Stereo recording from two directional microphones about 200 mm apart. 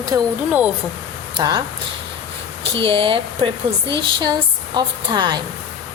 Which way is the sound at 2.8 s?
25° right (ahead or behind).